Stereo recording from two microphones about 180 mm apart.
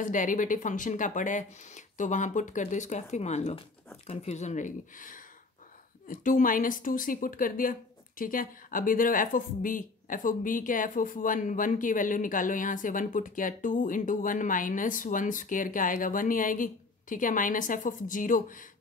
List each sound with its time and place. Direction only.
0.0 s speech: 45° left (ahead or behind)